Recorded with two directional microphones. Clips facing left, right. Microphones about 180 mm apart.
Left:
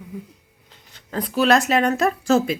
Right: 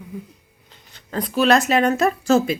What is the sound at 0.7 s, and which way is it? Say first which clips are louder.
Speech: right 1 dB; 10° left (ahead or behind).